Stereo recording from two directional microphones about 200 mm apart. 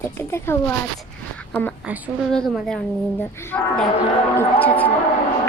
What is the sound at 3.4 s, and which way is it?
Speech, 10° left (ahead or behind).